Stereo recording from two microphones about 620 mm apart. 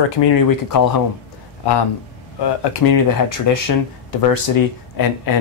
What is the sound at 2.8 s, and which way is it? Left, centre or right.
Speech, left.